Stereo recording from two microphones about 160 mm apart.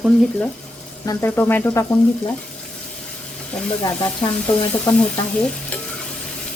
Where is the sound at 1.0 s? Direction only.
15° left (ahead or behind).